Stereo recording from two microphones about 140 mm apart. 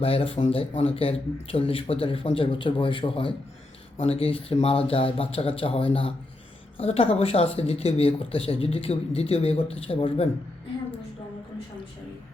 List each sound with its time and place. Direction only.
0.0 s speech: 40° left (ahead or behind)